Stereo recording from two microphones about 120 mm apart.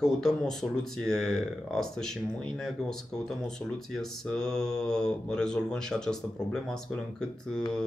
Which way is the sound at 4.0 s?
5° left (ahead or behind).